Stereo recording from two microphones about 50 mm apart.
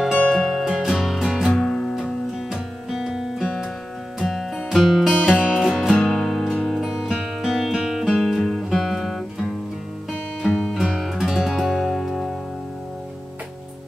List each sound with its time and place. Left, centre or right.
0.2 s music: centre
0.5 s music: centre
1.5 s music: centre
2.5 s music: centre
5.3 s music: centre
5.6 s music: centre
5.9 s music: left
6.2 s music: centre
6.8 s music: centre
8.4 s music: centre
10.4 s music: centre
10.7 s music: centre